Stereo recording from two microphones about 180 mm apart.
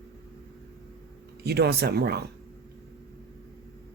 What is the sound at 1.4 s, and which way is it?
Speech, 65° right (ahead or behind).